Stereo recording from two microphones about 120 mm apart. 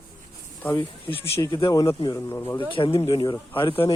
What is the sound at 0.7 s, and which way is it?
Speech, 40° left (ahead or behind).